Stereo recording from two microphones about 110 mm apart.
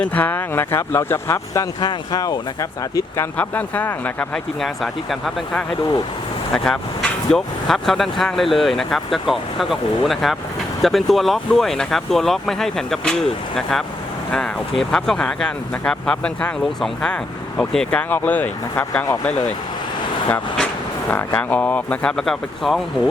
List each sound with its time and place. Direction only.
0.0 s speech: 15° left (ahead or behind)
1.8 s speech: 40° left (ahead or behind)
3.2 s speech: 15° left (ahead or behind)
4.6 s speech: centre (ahead or behind)
18.1 s speech: 15° left (ahead or behind)
21.1 s speech: 15° left (ahead or behind)